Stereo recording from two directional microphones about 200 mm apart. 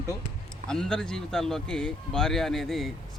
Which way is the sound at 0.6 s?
5° left (ahead or behind).